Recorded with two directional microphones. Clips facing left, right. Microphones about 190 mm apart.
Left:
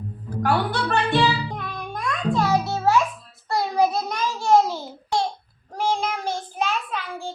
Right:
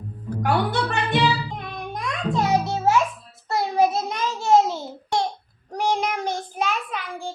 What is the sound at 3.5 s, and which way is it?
Child singing, 20° right (ahead or behind).